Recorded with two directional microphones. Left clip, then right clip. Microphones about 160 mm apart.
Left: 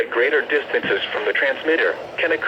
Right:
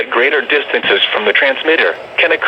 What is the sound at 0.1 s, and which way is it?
Speech, 25° right (ahead or behind).